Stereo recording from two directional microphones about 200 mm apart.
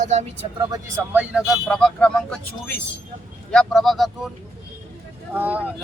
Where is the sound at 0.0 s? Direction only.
35° right (ahead or behind).